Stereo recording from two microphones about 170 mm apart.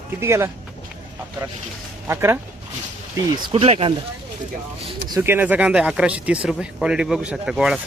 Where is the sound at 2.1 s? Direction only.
15° right (ahead or behind).